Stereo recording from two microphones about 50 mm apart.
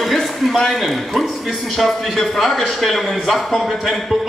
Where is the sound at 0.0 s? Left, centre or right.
Centre.